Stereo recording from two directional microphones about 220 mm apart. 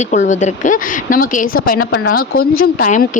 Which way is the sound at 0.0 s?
35° left (ahead or behind).